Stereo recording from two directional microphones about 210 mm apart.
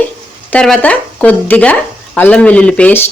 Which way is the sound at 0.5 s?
5° left (ahead or behind).